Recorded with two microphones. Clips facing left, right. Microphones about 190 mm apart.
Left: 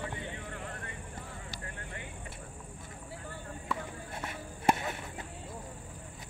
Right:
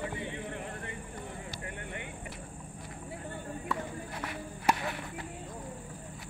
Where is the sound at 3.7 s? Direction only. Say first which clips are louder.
Right 1 dB; centre (ahead or behind).